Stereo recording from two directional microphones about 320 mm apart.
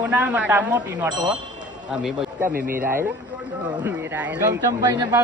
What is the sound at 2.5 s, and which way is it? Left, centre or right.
Speech, right.